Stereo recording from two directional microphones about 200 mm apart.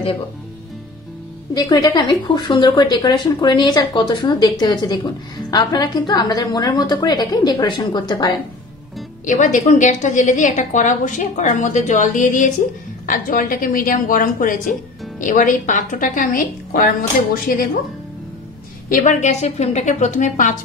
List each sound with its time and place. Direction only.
1.5 s a woman's voice: 20° left (ahead or behind)
9.2 s a woman's voice: 40° left (ahead or behind)
18.9 s a woman's voice: 40° left (ahead or behind)